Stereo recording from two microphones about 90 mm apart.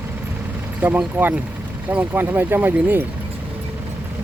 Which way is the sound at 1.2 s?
20° right (ahead or behind).